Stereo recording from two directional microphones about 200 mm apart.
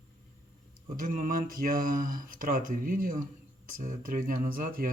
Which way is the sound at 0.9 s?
45° right (ahead or behind).